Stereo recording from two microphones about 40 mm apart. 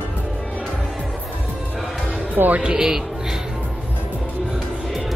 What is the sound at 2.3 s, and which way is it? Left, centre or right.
Speech, right.